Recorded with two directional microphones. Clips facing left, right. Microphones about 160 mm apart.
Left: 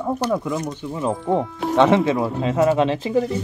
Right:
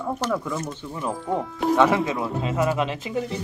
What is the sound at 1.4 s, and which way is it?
Speech, centre (ahead or behind).